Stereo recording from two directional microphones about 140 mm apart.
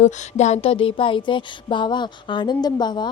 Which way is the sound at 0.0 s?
55° left (ahead or behind).